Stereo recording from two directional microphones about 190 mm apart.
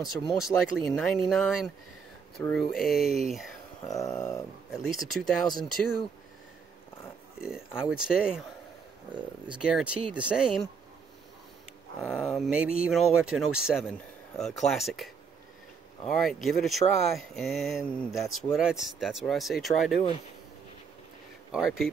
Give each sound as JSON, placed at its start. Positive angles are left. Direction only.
{"t": 0.3, "sound": "speech", "side_deg": 0}
{"t": 3.9, "sound": "dog", "side_deg": 15}
{"t": 4.8, "sound": "speech", "side_deg": 0}
{"t": 7.3, "sound": "speech", "side_deg": -5}
{"t": 9.6, "sound": "speech", "side_deg": -5}
{"t": 12.0, "sound": "speech", "side_deg": 0}
{"t": 21.5, "sound": "speech", "side_deg": 0}